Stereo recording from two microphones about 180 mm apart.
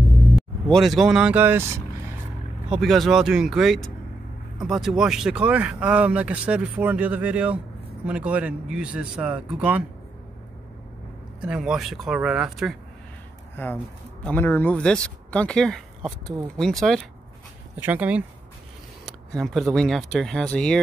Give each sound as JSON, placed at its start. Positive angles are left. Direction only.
{"t": 0.4, "sound": "speech", "side_deg": 0}
{"t": 2.7, "sound": "speech", "side_deg": 0}
{"t": 11.4, "sound": "speech", "side_deg": -5}
{"t": 13.6, "sound": "speech", "side_deg": 15}
{"t": 17.7, "sound": "speech", "side_deg": -10}